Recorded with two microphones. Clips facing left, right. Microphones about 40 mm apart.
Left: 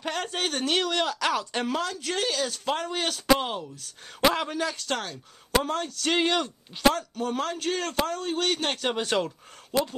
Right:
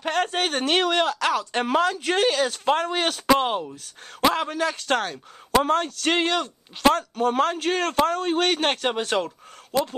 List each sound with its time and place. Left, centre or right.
0.0 s speech: right
1.0 s speech: centre
1.7 s speech: right
4.2 s speech: centre
4.7 s a man's voice: right
6.1 s speech: centre
6.8 s a man's voice: right
8.8 s speech: centre